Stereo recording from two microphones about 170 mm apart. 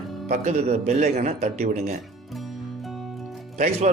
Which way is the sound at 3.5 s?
45° right (ahead or behind).